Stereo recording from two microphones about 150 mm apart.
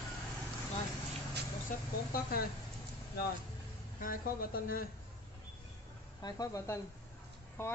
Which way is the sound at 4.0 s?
70° left (ahead or behind).